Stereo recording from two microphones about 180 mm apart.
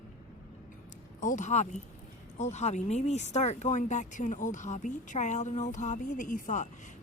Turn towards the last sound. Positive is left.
turn(degrees=45)  # may be behind; listen again after turning